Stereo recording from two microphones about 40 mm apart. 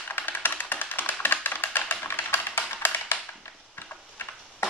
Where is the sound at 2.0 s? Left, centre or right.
Left.